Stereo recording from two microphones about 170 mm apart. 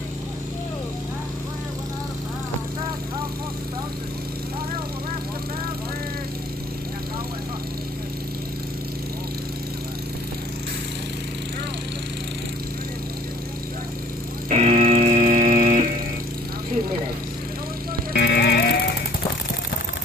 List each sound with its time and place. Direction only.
14.5 s music: 40° right (ahead or behind)
18.1 s music: 75° left (ahead or behind)